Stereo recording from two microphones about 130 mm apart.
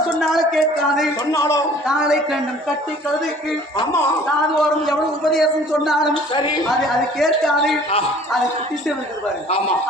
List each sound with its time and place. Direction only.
0.2 s a man's voice: centre (ahead or behind)
1.3 s a man's voice: 25° left (ahead or behind)
1.9 s a man's voice: 5° right (ahead or behind)
4.9 s a man's voice: centre (ahead or behind)
6.3 s speech: 35° left (ahead or behind)
7.2 s a man's voice: centre (ahead or behind)